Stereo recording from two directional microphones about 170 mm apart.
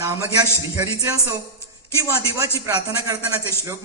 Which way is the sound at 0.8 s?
15° right (ahead or behind).